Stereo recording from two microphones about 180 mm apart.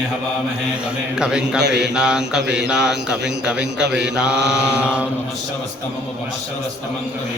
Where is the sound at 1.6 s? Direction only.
70° right (ahead or behind).